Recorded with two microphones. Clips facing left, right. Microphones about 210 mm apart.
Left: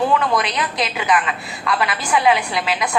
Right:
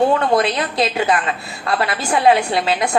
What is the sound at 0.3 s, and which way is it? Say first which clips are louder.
A woman's voice: right 4 dB; 30° right (ahead or behind).